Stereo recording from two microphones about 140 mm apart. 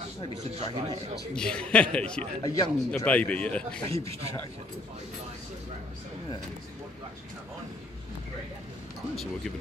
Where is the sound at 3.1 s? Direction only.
10° left (ahead or behind).